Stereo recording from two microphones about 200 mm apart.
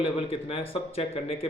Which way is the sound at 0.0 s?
30° left (ahead or behind).